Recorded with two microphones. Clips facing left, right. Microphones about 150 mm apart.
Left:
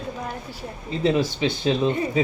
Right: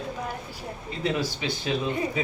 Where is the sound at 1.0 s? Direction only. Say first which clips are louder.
Left 6 dB; 25° left (ahead or behind).